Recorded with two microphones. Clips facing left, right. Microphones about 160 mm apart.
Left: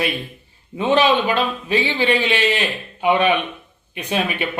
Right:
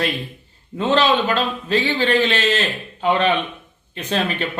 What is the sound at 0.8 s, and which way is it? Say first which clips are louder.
A man's voice: left 1 dB; 15° left (ahead or behind).